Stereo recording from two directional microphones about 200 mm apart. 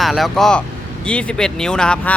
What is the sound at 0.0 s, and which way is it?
Speech, centre (ahead or behind).